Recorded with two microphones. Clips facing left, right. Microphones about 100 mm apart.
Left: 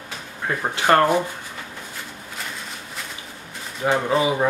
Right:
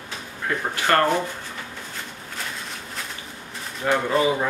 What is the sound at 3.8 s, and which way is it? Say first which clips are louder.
Speech: left 1 dB; 25° left (ahead or behind).